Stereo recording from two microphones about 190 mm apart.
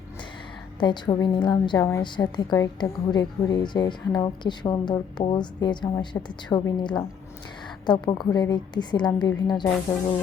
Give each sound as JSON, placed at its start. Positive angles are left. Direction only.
{"t": 0.8, "sound": "a woman's voice", "side_deg": 25}